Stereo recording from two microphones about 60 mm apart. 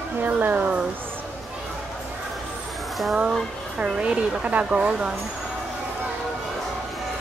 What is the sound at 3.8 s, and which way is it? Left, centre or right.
A woman's voice, centre.